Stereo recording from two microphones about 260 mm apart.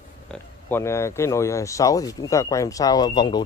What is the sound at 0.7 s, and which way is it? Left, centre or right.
Speech, centre.